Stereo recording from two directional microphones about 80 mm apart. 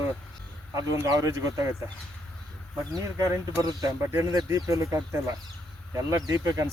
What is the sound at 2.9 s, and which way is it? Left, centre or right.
Speech, right.